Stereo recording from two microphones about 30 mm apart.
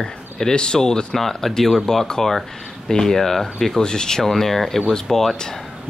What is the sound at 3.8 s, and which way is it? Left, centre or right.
Speech, left.